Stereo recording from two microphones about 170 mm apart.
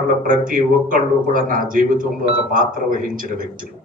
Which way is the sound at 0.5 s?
55° right (ahead or behind).